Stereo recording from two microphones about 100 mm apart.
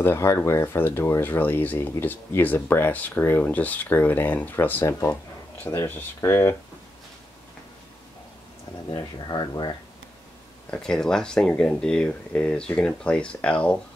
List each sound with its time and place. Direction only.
0.0 s speech: 25° left (ahead or behind)
8.9 s speech: 45° left (ahead or behind)
10.7 s speech: 5° left (ahead or behind)